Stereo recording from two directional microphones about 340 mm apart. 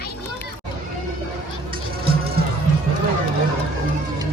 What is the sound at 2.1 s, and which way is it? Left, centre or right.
Music, right.